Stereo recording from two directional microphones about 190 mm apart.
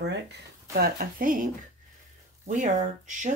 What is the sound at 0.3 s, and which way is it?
Speech, 50° right (ahead or behind).